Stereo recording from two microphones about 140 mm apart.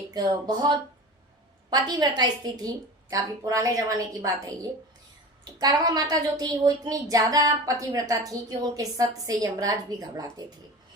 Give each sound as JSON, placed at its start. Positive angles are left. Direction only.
{"t": 0.1, "sound": "a woman's voice", "side_deg": -30}